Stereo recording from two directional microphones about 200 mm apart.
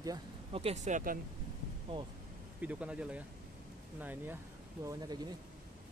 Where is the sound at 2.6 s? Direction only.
5° right (ahead or behind).